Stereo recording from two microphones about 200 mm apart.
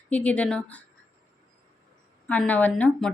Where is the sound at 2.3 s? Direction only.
5° left (ahead or behind).